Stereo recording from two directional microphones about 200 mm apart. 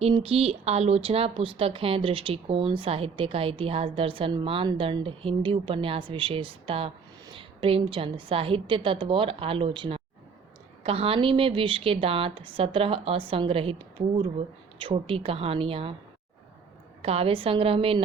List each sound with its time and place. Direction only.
0.0 s speech: 30° right (ahead or behind)
17.0 s speech: 30° right (ahead or behind)